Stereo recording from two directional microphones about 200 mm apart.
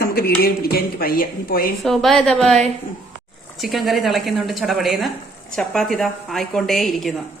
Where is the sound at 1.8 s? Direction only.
Centre (ahead or behind).